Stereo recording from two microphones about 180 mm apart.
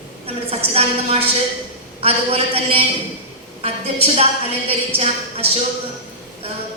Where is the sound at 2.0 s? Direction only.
35° right (ahead or behind).